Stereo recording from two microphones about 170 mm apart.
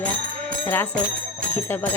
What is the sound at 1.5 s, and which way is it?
Jingle bell, 15° left (ahead or behind).